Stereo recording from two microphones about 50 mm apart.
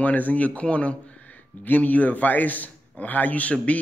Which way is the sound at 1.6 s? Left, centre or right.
Left.